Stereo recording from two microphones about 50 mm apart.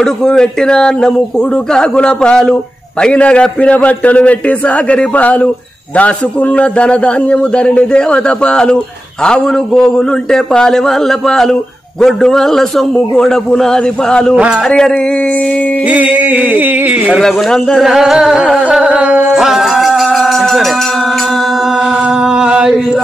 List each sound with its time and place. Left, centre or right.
0.0 s a man's voice: centre
15.9 s a sound: right
17.2 s a man's voice: centre
17.5 s a man's voice: centre
17.8 s music: centre
18.9 s music: right
19.2 s music: centre
22.1 s chant: centre